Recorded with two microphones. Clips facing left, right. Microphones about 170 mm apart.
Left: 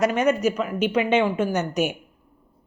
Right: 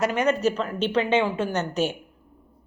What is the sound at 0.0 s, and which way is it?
A woman's voice, 15° left (ahead or behind).